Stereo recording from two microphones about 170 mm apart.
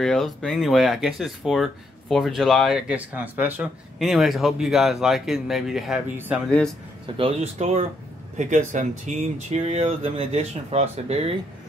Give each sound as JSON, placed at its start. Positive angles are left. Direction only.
{"t": 0.0, "sound": "speech", "side_deg": 0}
{"t": 7.2, "sound": "speech", "side_deg": -35}